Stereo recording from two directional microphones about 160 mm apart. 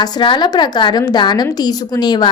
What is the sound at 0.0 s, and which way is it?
A woman's voice, 30° left (ahead or behind).